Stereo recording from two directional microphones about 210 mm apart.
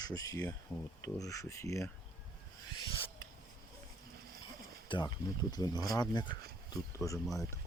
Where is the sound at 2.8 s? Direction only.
25° left (ahead or behind).